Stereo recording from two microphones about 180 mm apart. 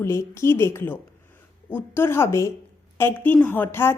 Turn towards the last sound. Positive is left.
turn(degrees=10)  # may be behind; listen again after turning